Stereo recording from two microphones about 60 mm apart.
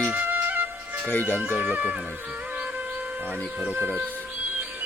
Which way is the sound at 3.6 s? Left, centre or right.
Right.